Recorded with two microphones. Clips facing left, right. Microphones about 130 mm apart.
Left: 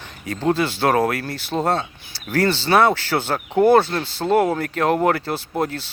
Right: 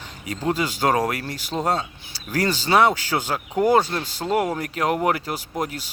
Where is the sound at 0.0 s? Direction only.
15° right (ahead or behind).